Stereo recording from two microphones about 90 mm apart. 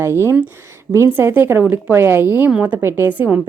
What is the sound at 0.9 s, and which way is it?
A woman's voice, 30° right (ahead or behind).